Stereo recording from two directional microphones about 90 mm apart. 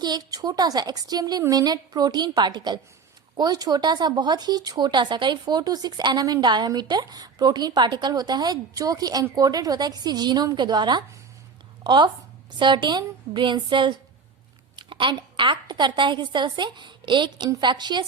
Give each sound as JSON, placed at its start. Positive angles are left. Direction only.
{"t": 0.0, "sound": "a woman's voice", "side_deg": -50}